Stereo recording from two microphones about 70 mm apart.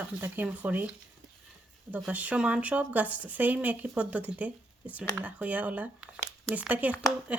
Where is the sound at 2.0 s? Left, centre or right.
Centre.